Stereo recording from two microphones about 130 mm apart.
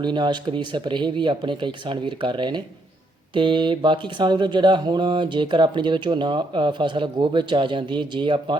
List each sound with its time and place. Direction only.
0.0 s speech: 35° right (ahead or behind)